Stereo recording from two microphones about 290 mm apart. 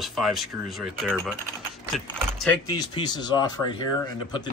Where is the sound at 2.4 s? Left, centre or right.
Centre.